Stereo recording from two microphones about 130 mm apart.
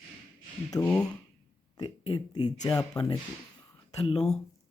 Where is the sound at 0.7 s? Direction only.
30° left (ahead or behind).